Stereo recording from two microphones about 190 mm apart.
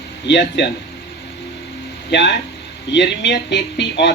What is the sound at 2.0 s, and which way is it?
Speech, 65° left (ahead or behind).